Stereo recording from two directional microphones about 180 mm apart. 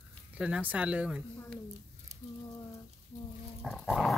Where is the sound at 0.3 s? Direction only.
5° right (ahead or behind).